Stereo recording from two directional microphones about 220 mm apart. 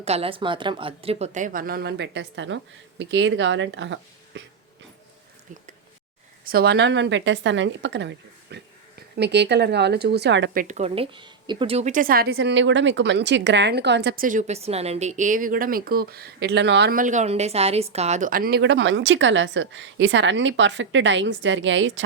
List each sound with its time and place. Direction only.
0.0 s speech: 25° right (ahead or behind); by 4.4 s 55° right (ahead or behind)
6.4 s speech: 45° right (ahead or behind)
10.6 s speech: 30° right (ahead or behind); by 22.0 s 60° right (ahead or behind)